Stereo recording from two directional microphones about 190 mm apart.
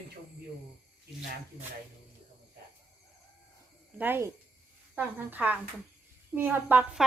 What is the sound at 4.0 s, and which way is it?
A woman's voice, 10° right (ahead or behind).